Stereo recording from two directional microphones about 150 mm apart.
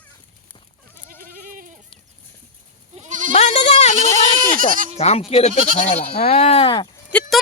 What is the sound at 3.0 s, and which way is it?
Goat, 60° right (ahead or behind).